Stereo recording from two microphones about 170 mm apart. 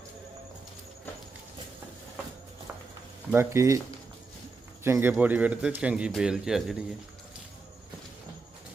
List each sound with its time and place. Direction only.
3.3 s a man's voice: 15° right (ahead or behind)
4.8 s a man's voice: 15° right (ahead or behind)